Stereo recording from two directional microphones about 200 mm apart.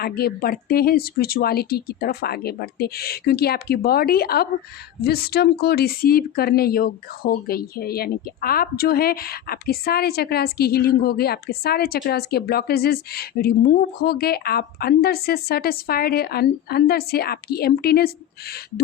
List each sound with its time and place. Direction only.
0.0 s speech: 50° left (ahead or behind)